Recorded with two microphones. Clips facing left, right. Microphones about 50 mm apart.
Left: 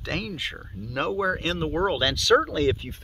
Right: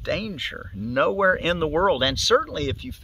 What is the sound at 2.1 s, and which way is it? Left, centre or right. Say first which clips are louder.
Speech: even; centre.